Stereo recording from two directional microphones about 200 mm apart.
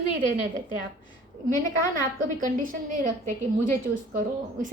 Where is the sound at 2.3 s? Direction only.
40° right (ahead or behind).